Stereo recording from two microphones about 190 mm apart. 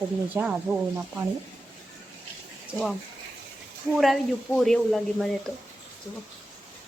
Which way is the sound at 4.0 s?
Centre (ahead or behind).